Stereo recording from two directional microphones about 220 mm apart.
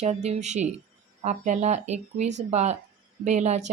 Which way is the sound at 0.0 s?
30° right (ahead or behind).